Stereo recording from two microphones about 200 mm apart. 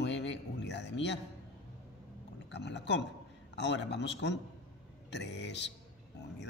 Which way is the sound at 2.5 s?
60° left (ahead or behind).